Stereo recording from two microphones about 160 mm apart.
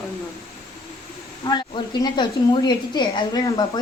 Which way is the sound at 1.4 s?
25° left (ahead or behind).